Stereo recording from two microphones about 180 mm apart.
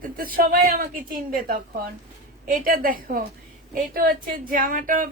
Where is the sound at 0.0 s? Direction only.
50° right (ahead or behind).